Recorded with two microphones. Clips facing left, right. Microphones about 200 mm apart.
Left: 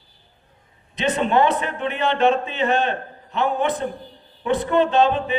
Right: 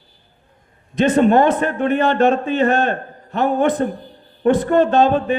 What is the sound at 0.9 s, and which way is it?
Speech, 45° right (ahead or behind).